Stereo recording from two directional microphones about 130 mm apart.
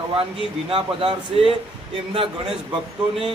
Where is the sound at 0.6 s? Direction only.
40° right (ahead or behind).